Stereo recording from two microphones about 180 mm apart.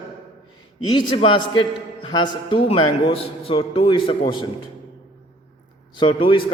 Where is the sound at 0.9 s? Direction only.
25° left (ahead or behind).